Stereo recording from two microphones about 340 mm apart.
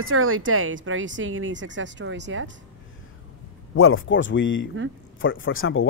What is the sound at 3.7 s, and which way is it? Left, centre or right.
Speech, left.